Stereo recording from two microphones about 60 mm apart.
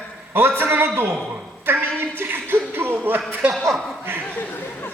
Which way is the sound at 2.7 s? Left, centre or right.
Right.